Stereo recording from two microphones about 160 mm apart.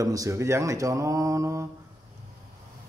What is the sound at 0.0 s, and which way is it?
A man's voice, 20° right (ahead or behind).